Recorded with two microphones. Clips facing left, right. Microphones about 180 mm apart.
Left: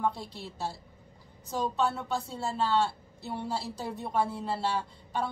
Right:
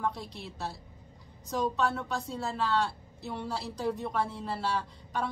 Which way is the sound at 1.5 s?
30° left (ahead or behind).